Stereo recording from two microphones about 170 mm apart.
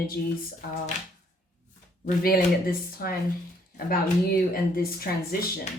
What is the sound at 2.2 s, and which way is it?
Speech, 60° left (ahead or behind).